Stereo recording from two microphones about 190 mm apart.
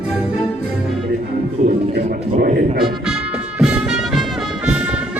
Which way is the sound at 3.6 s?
5° right (ahead or behind).